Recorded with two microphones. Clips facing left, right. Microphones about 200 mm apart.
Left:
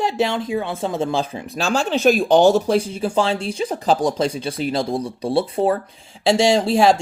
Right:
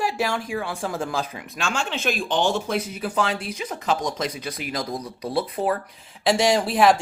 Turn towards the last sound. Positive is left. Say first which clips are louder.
# left 3 dB
turn(degrees=25)  # may be behind; listen again after turning